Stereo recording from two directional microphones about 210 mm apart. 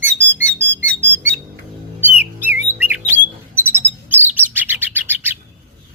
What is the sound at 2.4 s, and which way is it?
Bird, 10° right (ahead or behind).